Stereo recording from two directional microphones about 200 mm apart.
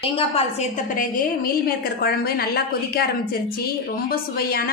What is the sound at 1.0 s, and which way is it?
A woman's voice, 45° left (ahead or behind).